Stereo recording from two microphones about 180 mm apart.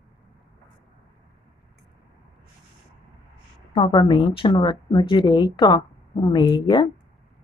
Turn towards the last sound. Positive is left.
turn(degrees=25)  # may be behind; listen again after turning